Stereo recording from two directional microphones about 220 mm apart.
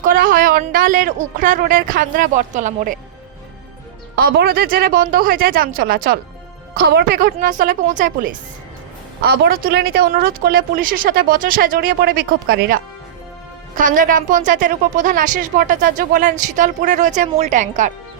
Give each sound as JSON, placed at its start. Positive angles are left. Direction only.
{"t": 0.0, "sound": "a woman's voice", "side_deg": -40}
{"t": 4.1, "sound": "a woman's voice", "side_deg": -45}